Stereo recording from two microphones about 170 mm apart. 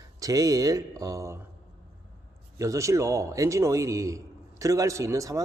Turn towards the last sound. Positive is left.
turn(degrees=-20)  # may be behind; listen again after turning